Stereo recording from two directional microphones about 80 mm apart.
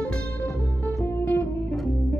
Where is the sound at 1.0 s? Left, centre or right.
Left.